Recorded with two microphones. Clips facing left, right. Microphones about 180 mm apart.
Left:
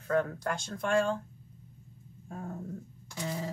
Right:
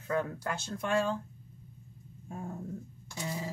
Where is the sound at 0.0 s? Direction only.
5° right (ahead or behind).